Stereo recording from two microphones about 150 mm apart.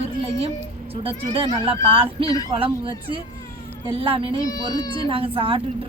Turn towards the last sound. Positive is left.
turn(degrees=-35)  # may be behind; listen again after turning